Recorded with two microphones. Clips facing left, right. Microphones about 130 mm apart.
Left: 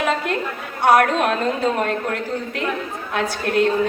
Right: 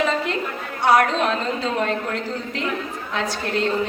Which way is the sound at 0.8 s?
50° left (ahead or behind).